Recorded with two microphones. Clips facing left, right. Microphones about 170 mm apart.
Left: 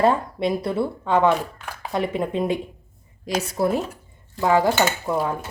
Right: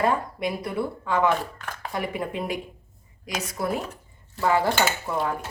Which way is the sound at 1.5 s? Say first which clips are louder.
Left 1 dB; 10° left (ahead or behind).